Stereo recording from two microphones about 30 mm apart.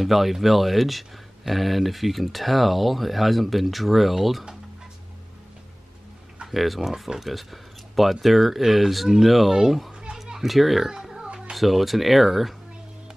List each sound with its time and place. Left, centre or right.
0.0 s speech: centre
6.5 s speech: centre
6.9 s speech: centre
7.2 s speech: centre
10.1 s children playing: centre
10.4 s speech: centre
10.9 s music: right
11.5 s speech: centre